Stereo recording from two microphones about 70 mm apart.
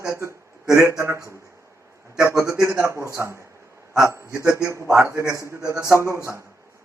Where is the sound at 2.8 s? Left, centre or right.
Right.